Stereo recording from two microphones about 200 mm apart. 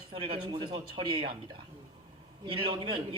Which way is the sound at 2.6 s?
25° right (ahead or behind).